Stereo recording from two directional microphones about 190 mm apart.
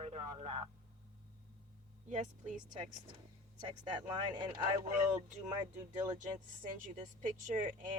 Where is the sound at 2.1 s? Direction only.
40° right (ahead or behind).